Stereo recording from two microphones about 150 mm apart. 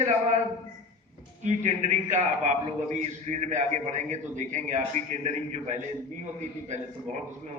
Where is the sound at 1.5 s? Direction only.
50° right (ahead or behind).